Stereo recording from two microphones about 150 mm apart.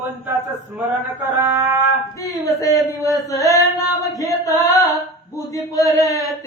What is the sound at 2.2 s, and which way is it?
Mantra, 20° left (ahead or behind).